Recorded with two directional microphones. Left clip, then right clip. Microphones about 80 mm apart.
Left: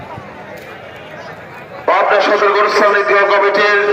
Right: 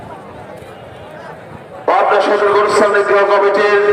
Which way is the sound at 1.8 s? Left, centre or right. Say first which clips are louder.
Even; right.